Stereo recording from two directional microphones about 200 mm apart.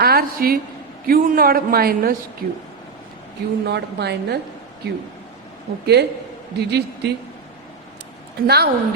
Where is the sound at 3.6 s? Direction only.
55° right (ahead or behind).